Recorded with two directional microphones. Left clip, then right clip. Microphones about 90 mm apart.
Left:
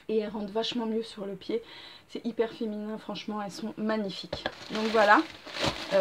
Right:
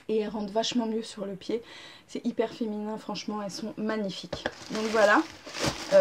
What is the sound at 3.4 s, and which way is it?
Speech, 20° right (ahead or behind).